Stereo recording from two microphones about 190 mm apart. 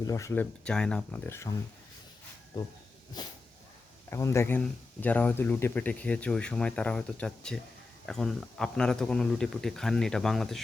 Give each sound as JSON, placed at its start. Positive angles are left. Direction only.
{"t": 0.0, "sound": "speech", "side_deg": 15}
{"t": 0.6, "sound": "speech", "side_deg": 5}
{"t": 3.2, "sound": "speech", "side_deg": 20}